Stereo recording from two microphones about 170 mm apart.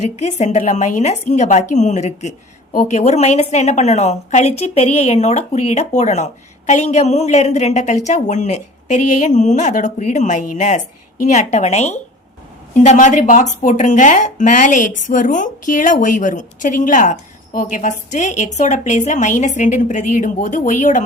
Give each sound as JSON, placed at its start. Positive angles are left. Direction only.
{"t": 0.0, "sound": "a woman's voice", "side_deg": 40}